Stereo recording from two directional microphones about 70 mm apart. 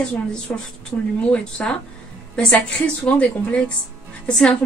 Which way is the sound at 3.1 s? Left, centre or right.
Centre.